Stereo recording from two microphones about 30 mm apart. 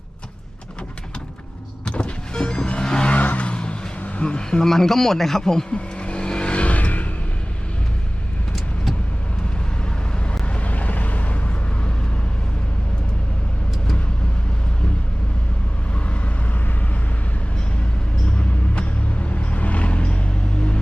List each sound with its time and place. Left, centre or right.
1.9 s car: left
3.3 s vehicle: left
4.2 s a sound: left
4.6 s a man's voice: centre
5.7 s vehicle: left
8.5 s vehicle: centre
10.4 s vehicle: left
18.3 s vehicle: left